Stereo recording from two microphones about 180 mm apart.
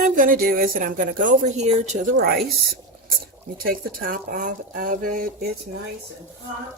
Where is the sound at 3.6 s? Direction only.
55° right (ahead or behind).